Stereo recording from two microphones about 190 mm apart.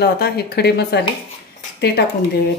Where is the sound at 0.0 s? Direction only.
55° left (ahead or behind).